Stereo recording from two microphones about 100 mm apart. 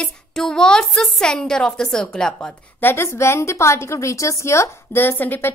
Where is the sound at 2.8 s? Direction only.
25° left (ahead or behind).